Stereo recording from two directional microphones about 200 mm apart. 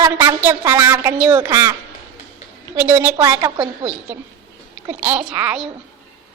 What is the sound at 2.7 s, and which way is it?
Speech, 10° right (ahead or behind).